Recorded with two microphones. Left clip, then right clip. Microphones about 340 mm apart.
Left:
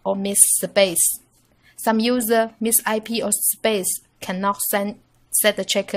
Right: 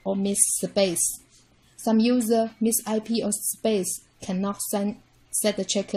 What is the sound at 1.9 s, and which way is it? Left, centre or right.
A woman's voice, left.